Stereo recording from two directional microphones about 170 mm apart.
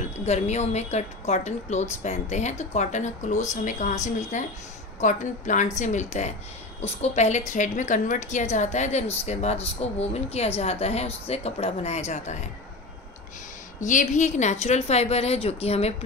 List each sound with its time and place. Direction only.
0.2 s a woman's voice: 40° left (ahead or behind)
13.7 s a woman's voice: 50° left (ahead or behind)